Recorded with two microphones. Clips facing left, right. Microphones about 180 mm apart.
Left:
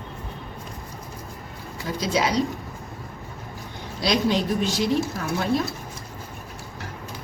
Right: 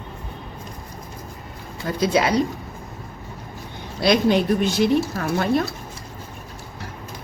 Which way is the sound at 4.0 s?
55° right (ahead or behind).